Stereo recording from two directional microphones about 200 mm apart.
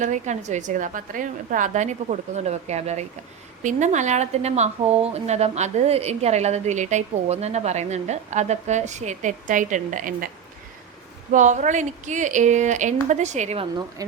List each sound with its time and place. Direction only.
0.0 s speech: 35° right (ahead or behind)
11.3 s speech: 40° right (ahead or behind)